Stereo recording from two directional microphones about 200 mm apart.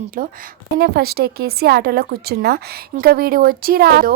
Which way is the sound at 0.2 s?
40° right (ahead or behind).